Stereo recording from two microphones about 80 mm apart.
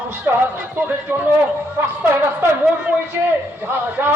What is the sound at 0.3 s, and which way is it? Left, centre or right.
Speech, right.